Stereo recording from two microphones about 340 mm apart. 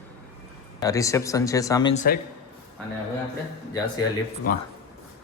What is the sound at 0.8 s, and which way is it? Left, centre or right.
A man's voice, centre.